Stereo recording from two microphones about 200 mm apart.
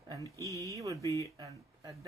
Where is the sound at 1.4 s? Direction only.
15° right (ahead or behind).